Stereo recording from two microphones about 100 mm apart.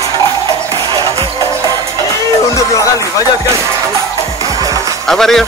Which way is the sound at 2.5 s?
35° left (ahead or behind).